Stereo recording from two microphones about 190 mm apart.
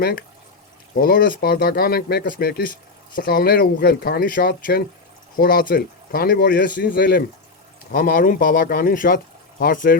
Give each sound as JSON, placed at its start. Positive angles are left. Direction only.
{"t": 0.0, "sound": "speech", "side_deg": 55}